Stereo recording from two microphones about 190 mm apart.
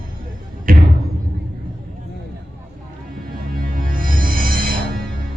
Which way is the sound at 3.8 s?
45° right (ahead or behind).